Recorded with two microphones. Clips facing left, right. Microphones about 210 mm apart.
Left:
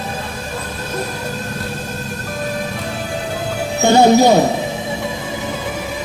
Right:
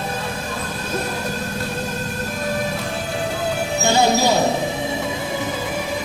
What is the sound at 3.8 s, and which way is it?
Speech, 55° left (ahead or behind).